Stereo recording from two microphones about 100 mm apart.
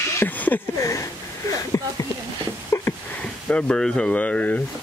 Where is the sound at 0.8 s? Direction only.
30° left (ahead or behind).